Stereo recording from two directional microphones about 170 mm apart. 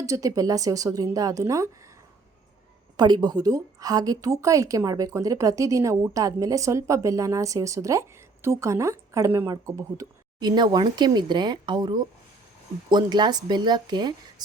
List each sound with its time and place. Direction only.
0.0 s a woman's voice: 20° right (ahead or behind)
3.0 s a woman's voice: 25° right (ahead or behind)